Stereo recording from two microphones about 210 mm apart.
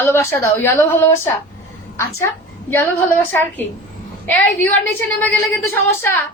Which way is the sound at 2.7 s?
10° left (ahead or behind).